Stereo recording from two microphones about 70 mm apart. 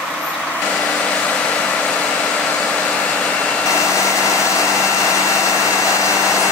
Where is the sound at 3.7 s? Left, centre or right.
Left.